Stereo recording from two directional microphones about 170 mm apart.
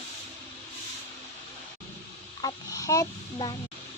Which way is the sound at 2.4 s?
20° left (ahead or behind).